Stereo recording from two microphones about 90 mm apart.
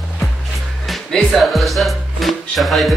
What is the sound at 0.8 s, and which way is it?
Music, 5° left (ahead or behind).